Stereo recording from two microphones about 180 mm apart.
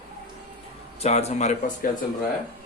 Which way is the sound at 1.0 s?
35° left (ahead or behind).